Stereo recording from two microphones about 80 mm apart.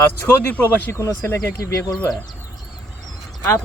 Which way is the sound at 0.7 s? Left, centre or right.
Left.